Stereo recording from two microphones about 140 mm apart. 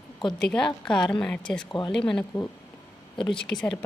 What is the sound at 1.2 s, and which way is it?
Speech, 5° left (ahead or behind).